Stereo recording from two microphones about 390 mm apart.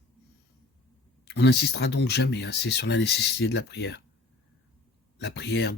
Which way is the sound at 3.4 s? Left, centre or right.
Left.